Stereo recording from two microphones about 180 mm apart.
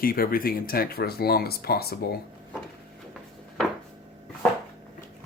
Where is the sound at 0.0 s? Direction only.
55° left (ahead or behind).